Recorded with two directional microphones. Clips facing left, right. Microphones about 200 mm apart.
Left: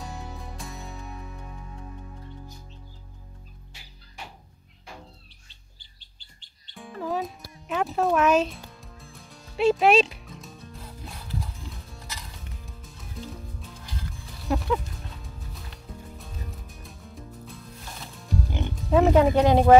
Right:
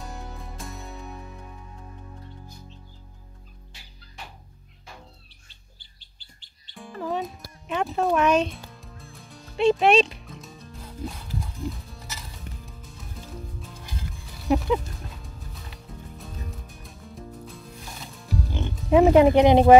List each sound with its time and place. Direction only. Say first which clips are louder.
0.0 s music: left 1 dB; centre (ahead or behind)
6.7 s music: even; centre (ahead or behind)
14.5 s music: right 5 dB; 20° right (ahead or behind)
15.0 s music: even; centre (ahead or behind)
18.9 s speech: right 3 dB; 15° right (ahead or behind)